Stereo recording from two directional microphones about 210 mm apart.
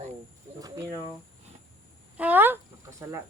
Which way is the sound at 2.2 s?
10° right (ahead or behind).